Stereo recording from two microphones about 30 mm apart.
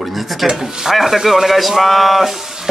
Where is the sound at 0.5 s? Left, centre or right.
Centre.